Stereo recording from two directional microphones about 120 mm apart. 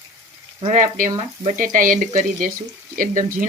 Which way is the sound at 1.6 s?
90° right.